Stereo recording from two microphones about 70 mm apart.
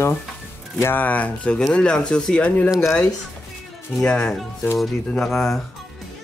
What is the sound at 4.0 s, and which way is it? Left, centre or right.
Speech, centre.